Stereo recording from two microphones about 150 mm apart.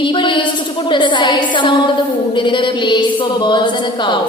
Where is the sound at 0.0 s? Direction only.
35° left (ahead or behind).